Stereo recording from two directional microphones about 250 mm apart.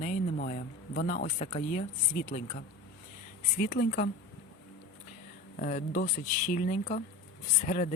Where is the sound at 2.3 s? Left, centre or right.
Left.